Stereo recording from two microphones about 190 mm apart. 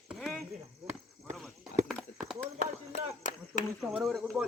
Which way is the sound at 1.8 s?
Centre (ahead or behind).